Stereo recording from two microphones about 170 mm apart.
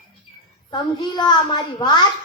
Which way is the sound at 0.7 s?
25° left (ahead or behind).